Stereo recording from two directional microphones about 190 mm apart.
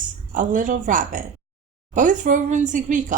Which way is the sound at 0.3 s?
45° right (ahead or behind).